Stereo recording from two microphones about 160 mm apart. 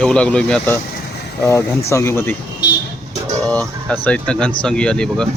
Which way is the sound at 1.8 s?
20° left (ahead or behind).